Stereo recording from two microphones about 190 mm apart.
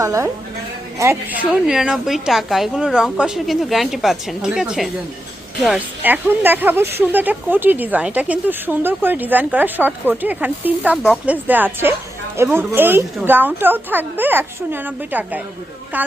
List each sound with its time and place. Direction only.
0.0 s a woman's voice: 15° right (ahead or behind)